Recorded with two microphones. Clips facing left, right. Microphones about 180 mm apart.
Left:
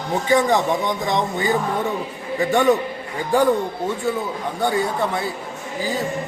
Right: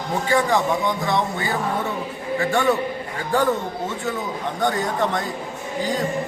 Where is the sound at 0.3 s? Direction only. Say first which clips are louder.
Left 2 dB; 20° left (ahead or behind).